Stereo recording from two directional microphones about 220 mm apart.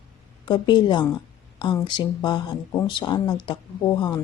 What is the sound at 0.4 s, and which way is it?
Speech, 20° left (ahead or behind).